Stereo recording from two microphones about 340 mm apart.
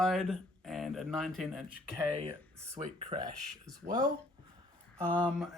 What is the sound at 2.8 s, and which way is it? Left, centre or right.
Speech, right.